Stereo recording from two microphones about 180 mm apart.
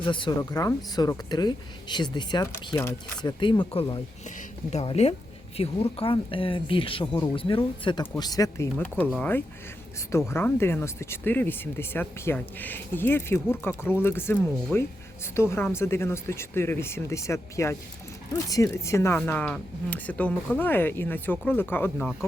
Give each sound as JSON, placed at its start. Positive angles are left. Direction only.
{"t": 0.0, "sound": "speech", "side_deg": 25}